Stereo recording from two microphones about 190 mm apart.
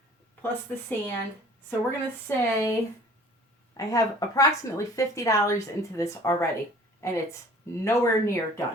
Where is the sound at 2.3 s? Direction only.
15° left (ahead or behind).